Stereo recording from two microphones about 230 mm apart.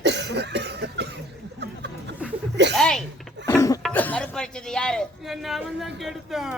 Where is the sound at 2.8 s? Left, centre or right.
Centre.